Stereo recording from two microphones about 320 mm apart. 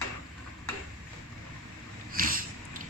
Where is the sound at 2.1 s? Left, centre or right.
Right.